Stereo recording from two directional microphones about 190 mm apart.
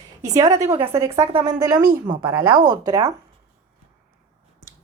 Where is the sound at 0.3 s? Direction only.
15° right (ahead or behind).